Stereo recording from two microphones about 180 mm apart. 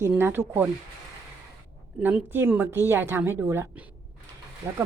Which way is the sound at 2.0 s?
10° right (ahead or behind).